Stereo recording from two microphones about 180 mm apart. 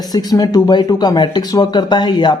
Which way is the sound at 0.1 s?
20° left (ahead or behind).